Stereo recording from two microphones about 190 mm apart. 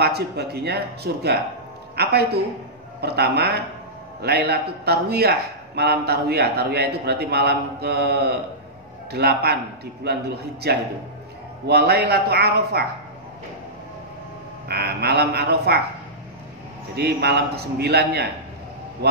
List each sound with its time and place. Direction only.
0.0 s a man's voice: 55° right (ahead or behind)
14.7 s a man's voice: 55° right (ahead or behind)
16.9 s a man's voice: 60° right (ahead or behind)